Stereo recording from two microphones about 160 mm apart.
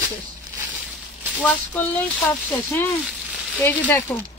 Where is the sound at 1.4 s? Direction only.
10° left (ahead or behind).